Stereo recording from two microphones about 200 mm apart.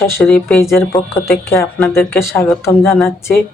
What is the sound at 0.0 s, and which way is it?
A man's voice, 5° left (ahead or behind).